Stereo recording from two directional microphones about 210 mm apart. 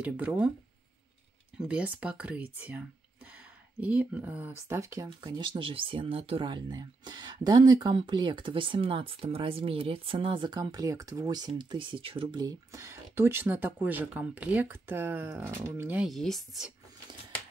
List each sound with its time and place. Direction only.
0.0 s speech: 5° right (ahead or behind)
1.6 s speech: 5° right (ahead or behind)